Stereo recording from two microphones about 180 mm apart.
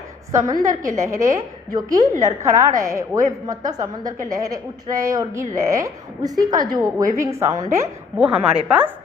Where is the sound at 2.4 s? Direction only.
15° right (ahead or behind).